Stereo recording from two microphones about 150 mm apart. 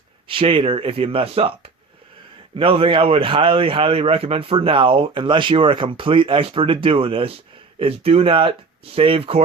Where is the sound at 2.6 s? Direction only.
35° right (ahead or behind).